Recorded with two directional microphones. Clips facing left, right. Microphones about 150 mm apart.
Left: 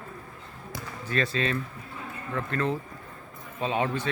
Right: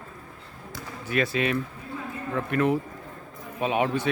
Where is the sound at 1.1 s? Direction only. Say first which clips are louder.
Right 3 dB; 10° right (ahead or behind).